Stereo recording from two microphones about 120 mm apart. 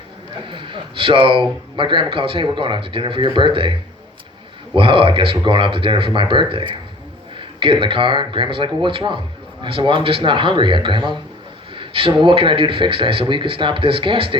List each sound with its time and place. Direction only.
0.4 s a man's voice: 45° right (ahead or behind)